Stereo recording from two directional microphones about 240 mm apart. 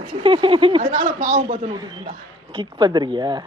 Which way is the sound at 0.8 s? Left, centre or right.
Right.